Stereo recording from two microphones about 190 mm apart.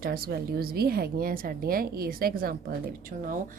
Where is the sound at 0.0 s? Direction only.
50° right (ahead or behind).